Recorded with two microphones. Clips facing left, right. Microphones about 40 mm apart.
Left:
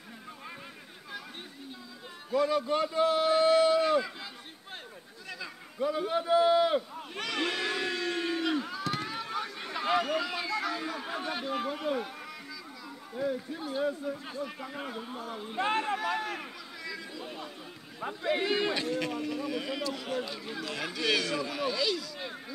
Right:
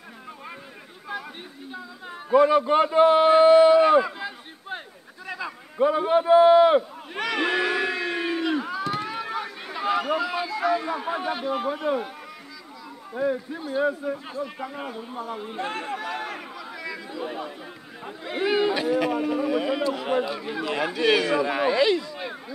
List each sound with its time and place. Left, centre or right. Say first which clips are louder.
1.1 s a sound: right 9 dB; centre
1.7 s a sound: right 8 dB; right
5.8 s a man's voice: right 9 dB; right
7.2 s crowd: right 8 dB; centre
13.1 s a man's voice: right 7 dB; right
13.6 s speech: right 7 dB; centre
13.8 s a man's voice: right 6 dB; right
14.7 s speech: right 4 dB; centre
16.3 s chatter: right 3 dB; centre
18.2 s speech: right 6 dB; centre
19.1 s a man's voice: right 9 dB; right